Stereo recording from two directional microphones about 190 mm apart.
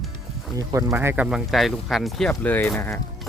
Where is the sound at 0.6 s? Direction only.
15° right (ahead or behind).